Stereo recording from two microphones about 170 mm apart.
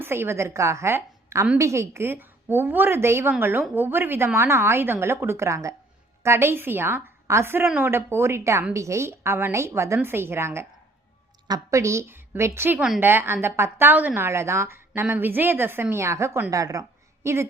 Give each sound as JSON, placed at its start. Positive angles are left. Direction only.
{"t": 0.0, "sound": "a woman's voice", "side_deg": -15}